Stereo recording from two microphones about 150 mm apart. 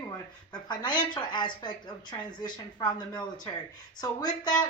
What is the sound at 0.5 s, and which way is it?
A woman's voice, 30° left (ahead or behind).